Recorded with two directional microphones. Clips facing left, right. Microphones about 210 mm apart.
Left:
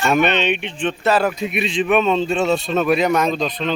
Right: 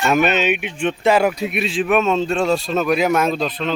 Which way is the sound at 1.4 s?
Centre (ahead or behind).